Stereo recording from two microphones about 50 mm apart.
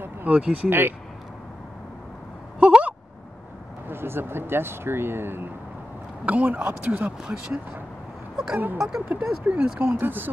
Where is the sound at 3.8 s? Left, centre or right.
Right.